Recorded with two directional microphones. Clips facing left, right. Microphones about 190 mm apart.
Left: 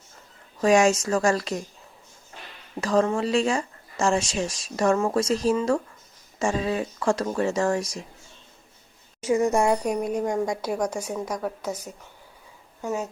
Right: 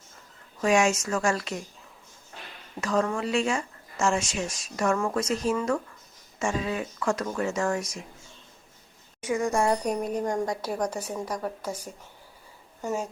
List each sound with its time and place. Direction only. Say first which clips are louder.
0.6 s speech: left 4 dB; 35° left (ahead or behind)
2.8 s speech: left 4 dB; 30° left (ahead or behind)
9.2 s speech: left 4 dB; 25° left (ahead or behind)
9.7 s speech: left 2 dB; 10° left (ahead or behind)
11.6 s a woman's voice: left 3 dB; 10° right (ahead or behind)